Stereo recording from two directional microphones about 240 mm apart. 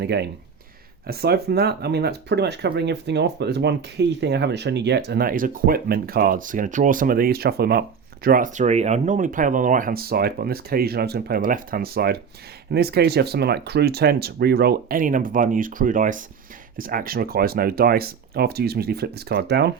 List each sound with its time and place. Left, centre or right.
0.0 s speech: right